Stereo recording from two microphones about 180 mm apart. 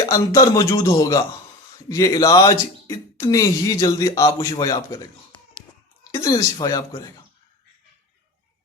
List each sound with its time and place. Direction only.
0.1 s speech: 20° left (ahead or behind)